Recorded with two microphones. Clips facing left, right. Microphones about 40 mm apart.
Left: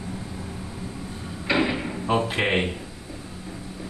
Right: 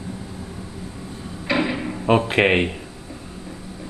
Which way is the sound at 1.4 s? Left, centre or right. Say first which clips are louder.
Right 1 dB; centre.